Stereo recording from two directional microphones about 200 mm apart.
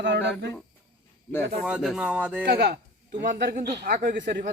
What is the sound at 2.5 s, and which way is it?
Speech, 55° right (ahead or behind).